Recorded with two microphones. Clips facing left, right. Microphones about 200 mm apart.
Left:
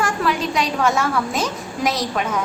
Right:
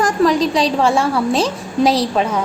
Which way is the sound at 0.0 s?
35° right (ahead or behind).